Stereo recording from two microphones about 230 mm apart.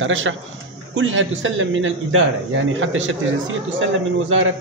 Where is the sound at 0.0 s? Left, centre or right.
Right.